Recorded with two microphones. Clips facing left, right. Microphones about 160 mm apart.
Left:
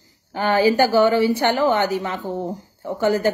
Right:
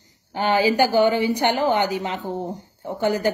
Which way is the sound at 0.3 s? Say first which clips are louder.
Left 2 dB; 15° right (ahead or behind).